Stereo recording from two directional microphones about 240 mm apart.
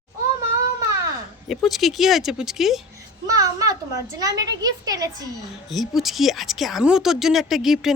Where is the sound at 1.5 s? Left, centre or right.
Centre.